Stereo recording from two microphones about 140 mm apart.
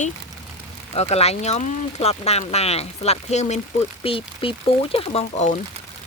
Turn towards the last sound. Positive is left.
turn(degrees=55)  # may be behind; listen again after turning